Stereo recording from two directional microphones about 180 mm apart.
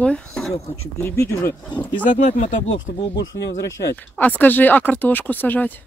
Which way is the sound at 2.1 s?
45° left (ahead or behind).